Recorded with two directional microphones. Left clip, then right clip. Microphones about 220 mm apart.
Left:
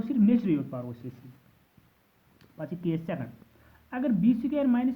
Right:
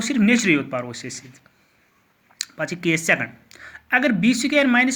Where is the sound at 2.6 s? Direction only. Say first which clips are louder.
Right 11 dB; 15° right (ahead or behind).